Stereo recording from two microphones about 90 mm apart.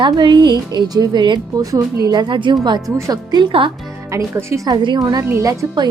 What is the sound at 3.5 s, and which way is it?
Speech, 70° right (ahead or behind).